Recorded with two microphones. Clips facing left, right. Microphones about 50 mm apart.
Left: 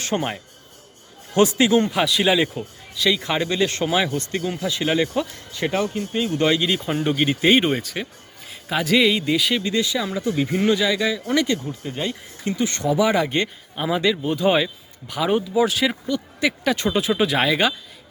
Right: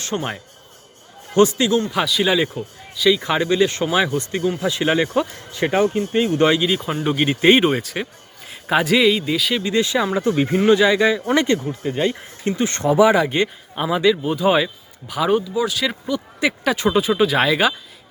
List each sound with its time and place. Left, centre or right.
0.0 s a man's voice: centre
4.6 s speech: centre
6.6 s speech: centre
9.8 s speech: right
11.6 s speech: right
12.5 s speech: right
13.1 s a man's voice: centre
13.8 s speech: centre
15.5 s speech: left
16.0 s speech: centre